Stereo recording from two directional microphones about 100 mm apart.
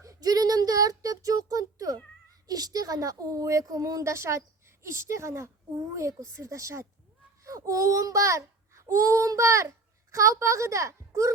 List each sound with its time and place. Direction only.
0.0 s a woman's voice: 35° right (ahead or behind)